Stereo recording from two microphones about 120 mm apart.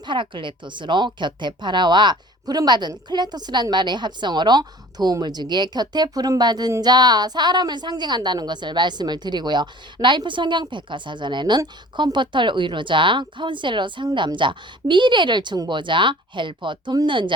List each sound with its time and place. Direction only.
0.0 s speech: 40° right (ahead or behind)